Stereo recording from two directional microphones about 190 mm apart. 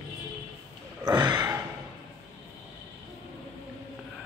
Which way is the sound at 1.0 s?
20° right (ahead or behind).